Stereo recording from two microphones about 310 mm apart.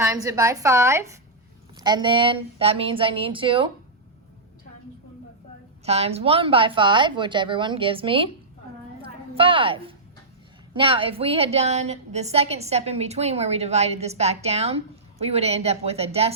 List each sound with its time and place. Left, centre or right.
0.0 s a woman's voice: centre
5.8 s a woman's voice: centre
9.0 s a sound: centre
10.8 s a woman's voice: centre